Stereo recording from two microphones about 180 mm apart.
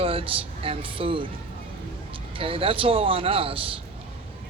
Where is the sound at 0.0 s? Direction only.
30° right (ahead or behind).